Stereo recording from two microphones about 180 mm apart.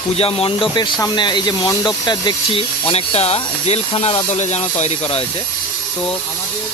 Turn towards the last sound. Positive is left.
turn(degrees=35)  # may be behind; listen again after turning